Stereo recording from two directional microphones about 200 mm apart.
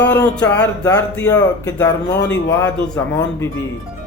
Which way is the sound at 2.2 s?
60° left (ahead or behind).